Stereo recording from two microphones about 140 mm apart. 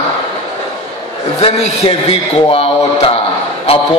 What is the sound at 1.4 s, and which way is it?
A man's voice, 40° left (ahead or behind).